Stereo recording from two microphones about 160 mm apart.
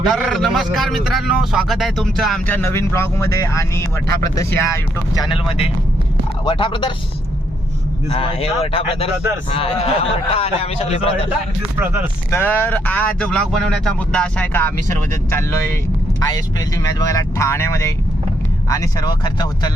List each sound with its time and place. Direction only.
0.1 s a man's voice: centre (ahead or behind)
2.5 s speech: 15° left (ahead or behind)
6.4 s speech: 30° left (ahead or behind)
8.1 s speech: 35° left (ahead or behind)
11.8 s speech: 15° right (ahead or behind)
12.3 s speech: 15° left (ahead or behind)